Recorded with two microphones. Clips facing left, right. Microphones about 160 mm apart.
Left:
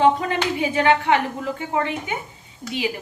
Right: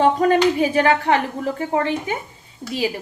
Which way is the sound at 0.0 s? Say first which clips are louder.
Right 4 dB; 45° right (ahead or behind).